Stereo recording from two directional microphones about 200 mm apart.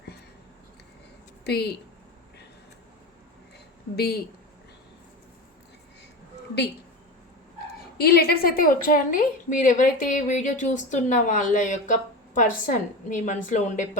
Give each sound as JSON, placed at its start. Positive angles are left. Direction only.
{"t": 3.9, "sound": "speech", "side_deg": 50}
{"t": 7.9, "sound": "a woman's voice", "side_deg": 50}